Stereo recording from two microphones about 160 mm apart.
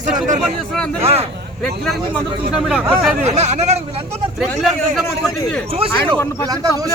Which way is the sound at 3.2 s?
45° right (ahead or behind).